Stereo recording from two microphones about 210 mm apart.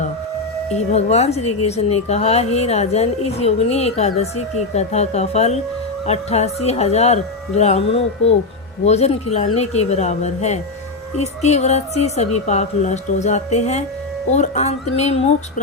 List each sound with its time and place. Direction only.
0.7 s a woman's voice: 30° left (ahead or behind)